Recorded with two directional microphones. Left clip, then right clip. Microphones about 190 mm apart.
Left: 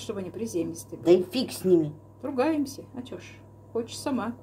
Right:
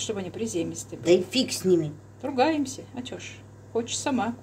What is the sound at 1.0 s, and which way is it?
Speech, 35° left (ahead or behind).